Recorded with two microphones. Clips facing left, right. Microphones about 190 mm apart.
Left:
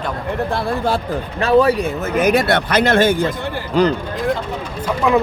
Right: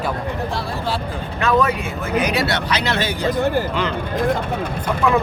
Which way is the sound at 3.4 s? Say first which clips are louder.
Right 7 dB; 45° right (ahead or behind).